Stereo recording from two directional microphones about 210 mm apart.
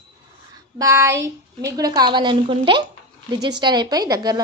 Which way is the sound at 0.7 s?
15° right (ahead or behind).